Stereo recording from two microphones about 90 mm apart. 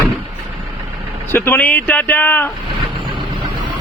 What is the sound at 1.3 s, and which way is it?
Speech, 25° left (ahead or behind).